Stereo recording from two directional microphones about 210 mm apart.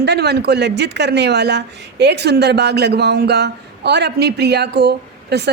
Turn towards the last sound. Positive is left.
turn(degrees=-50)  # may be behind; listen again after turning